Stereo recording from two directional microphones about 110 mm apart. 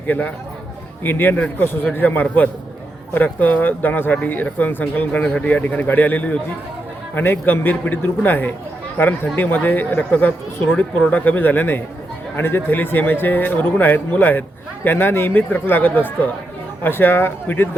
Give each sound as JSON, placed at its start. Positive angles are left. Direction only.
{"t": 0.1, "sound": "a man's voice", "side_deg": 15}